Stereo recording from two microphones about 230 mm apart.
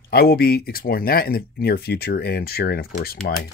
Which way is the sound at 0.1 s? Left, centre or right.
Left.